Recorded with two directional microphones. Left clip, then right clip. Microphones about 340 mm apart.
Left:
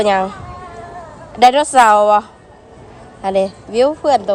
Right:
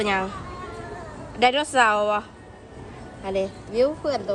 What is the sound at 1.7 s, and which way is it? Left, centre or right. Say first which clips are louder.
Speech: left 10 dB; left.